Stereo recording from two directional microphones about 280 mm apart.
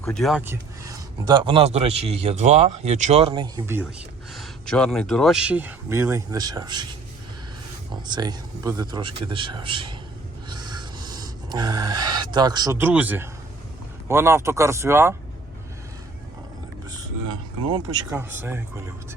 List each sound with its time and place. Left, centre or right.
0.0 s speech: centre
4.4 s speech: centre
8.0 s a man's voice: centre
10.5 s gasp: centre
14.1 s a man's voice: centre
17.7 s a man's voice: centre